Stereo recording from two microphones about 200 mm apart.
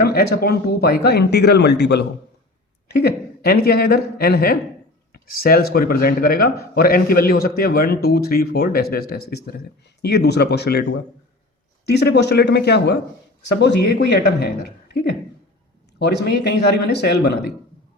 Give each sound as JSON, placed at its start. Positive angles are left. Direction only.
{"t": 0.1, "sound": "speech", "side_deg": 50}
{"t": 16.0, "sound": "speech", "side_deg": 55}